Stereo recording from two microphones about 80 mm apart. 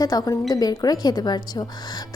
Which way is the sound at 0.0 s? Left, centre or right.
Left.